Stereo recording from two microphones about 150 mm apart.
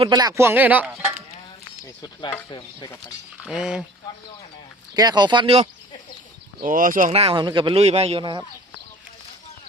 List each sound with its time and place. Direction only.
0.0 s speech: 30° right (ahead or behind); by 1.0 s 10° right (ahead or behind)
1.8 s speech: 25° left (ahead or behind)
3.4 s speech: 5° right (ahead or behind)
4.9 s speech: 25° right (ahead or behind)
6.6 s speech: 65° right (ahead or behind)
7.1 s a man's voice: 40° right (ahead or behind)
8.2 s speech: 30° right (ahead or behind)